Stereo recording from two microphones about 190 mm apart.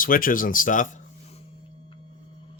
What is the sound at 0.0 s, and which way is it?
Speech, 45° left (ahead or behind).